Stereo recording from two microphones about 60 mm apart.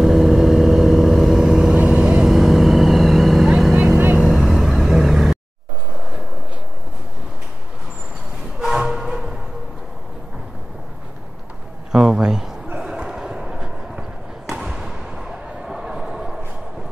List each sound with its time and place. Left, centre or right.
0.0 s vehicle: centre; by 2.2 s right
2.2 s vehicle: centre
4.2 s vehicle: centre
8.5 s train horn: centre
11.9 s a sound: centre
14.5 s basketball bounce: centre